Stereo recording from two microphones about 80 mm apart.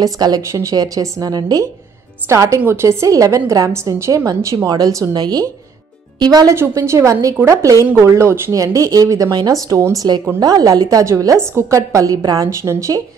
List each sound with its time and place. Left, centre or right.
0.0 s speech: right
0.4 s a woman's voice: right
0.7 s a woman's voice: right
4.6 s speech: right
5.1 s a woman's voice: right
6.5 s a woman's voice: right
7.8 s speech: right
12.4 s a woman's voice: right